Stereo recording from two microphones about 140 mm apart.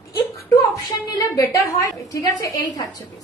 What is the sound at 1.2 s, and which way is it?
A woman's voice, 20° left (ahead or behind).